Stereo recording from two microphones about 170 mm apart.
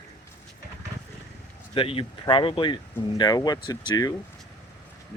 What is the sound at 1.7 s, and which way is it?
Speech, 30° left (ahead or behind).